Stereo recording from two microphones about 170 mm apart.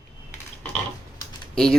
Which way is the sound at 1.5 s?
5° left (ahead or behind).